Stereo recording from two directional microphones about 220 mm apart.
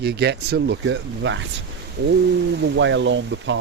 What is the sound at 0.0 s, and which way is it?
Speech, 50° right (ahead or behind).